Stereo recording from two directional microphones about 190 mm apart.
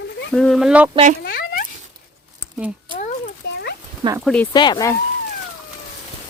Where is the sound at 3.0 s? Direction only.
40° left (ahead or behind).